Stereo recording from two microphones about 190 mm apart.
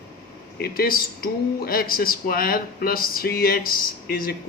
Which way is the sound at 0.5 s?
55° left (ahead or behind).